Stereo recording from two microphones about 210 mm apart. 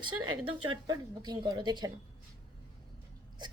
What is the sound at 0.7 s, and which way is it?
A woman's voice, 20° right (ahead or behind).